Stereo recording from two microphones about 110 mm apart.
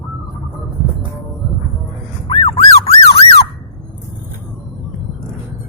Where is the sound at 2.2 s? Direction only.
55° left (ahead or behind).